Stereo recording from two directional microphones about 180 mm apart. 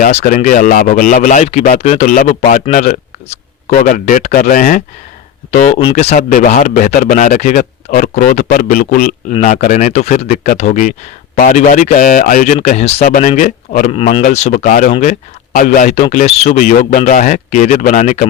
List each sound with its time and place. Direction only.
0.0 s speech: 40° left (ahead or behind)
13.9 s speech: 35° left (ahead or behind)